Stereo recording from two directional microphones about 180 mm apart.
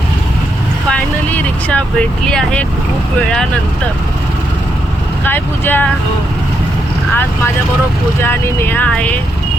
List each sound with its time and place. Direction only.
0.9 s speech: 10° left (ahead or behind)
5.2 s speech: 10° left (ahead or behind)
8.2 s speech: 10° left (ahead or behind)